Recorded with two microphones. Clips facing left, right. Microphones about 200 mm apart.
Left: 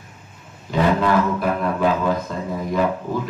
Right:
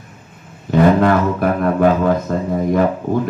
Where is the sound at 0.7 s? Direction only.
55° right (ahead or behind).